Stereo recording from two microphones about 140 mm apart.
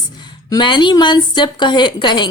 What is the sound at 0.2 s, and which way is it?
Speech, 35° left (ahead or behind).